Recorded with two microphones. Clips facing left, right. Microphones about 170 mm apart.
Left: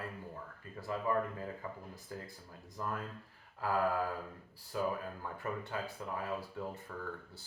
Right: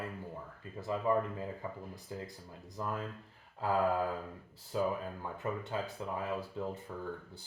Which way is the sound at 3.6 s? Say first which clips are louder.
Right 2 dB; 20° right (ahead or behind).